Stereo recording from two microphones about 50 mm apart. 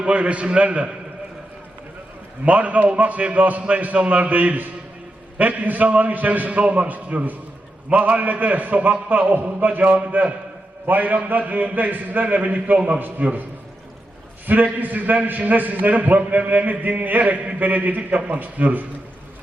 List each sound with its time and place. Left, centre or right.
0.0 s a man's voice: right
2.4 s a man's voice: right
14.4 s a man's voice: right